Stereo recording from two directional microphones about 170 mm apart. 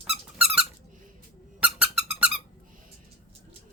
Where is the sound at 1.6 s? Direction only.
5° right (ahead or behind).